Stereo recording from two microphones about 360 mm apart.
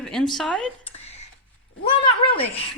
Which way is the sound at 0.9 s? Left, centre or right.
Centre.